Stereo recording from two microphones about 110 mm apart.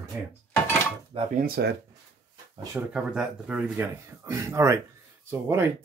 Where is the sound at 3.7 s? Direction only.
25° right (ahead or behind).